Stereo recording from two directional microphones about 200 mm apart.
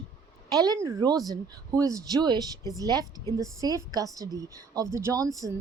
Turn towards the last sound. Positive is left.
turn(degrees=-15)  # may be behind; listen again after turning